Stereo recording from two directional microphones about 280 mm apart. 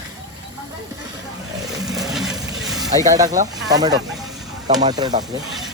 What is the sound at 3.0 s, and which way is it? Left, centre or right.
Speech, centre.